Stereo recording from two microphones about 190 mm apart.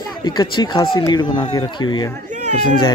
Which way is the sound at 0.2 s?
25° left (ahead or behind).